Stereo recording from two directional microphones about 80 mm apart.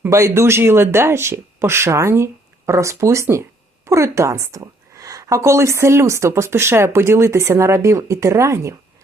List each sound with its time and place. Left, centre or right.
0.1 s a woman's voice: right